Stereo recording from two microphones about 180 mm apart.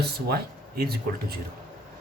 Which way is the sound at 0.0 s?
60° right (ahead or behind).